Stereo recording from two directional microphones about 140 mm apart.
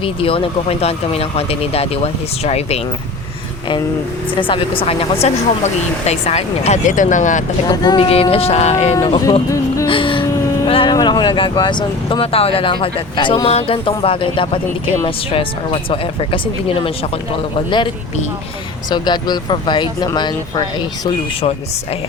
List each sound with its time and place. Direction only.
0.0 s speech: 40° left (ahead or behind)
4.4 s speech: 35° left (ahead or behind); by 7.4 s 65° left (ahead or behind)
7.7 s speech: 30° left (ahead or behind)
8.0 s speech: 45° left (ahead or behind)
9.0 s speech: 35° left (ahead or behind)
9.8 s whimper: 40° left (ahead or behind)
10.7 s speech: 35° left (ahead or behind)
18.9 s speech: 30° left (ahead or behind)